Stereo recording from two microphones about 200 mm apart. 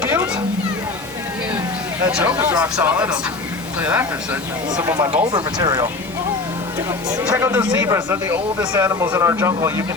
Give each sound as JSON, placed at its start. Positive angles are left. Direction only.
{"t": 0.0, "sound": "a sound", "side_deg": -10}
{"t": 2.0, "sound": "speech", "side_deg": -5}
{"t": 5.1, "sound": "speech", "side_deg": -25}
{"t": 7.2, "sound": "speech", "side_deg": -15}